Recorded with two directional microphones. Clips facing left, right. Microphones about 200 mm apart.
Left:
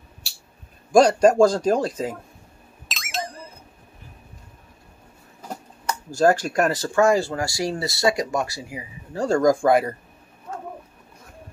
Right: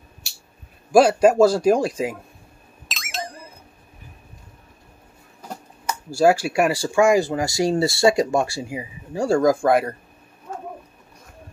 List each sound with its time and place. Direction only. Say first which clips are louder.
0.9 s a man's voice: right 1 dB; 5° right (ahead or behind)
2.9 s a sound: left 1 dB; centre (ahead or behind)
5.9 s speech: right 1 dB; 10° right (ahead or behind); by 8.8 s 25° right (ahead or behind)
9.1 s speech: right 1 dB; 10° right (ahead or behind)